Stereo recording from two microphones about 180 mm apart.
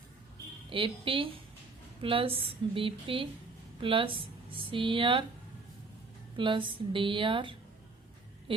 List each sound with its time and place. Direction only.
0.7 s speech: 30° right (ahead or behind)
6.3 s speech: 25° right (ahead or behind)